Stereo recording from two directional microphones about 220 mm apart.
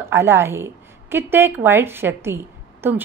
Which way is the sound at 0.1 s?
10° right (ahead or behind).